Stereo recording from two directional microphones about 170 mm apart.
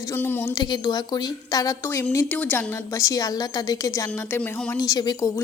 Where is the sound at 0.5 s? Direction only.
25° left (ahead or behind); by 4.7 s 5° left (ahead or behind).